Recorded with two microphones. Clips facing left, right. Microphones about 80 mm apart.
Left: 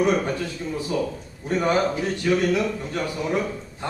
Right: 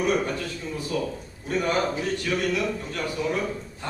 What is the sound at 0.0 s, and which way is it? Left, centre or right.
Speech, centre.